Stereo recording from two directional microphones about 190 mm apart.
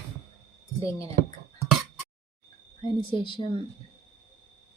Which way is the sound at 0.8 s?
15° left (ahead or behind).